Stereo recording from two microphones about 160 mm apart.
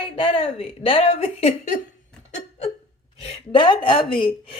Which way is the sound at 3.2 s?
35° left (ahead or behind).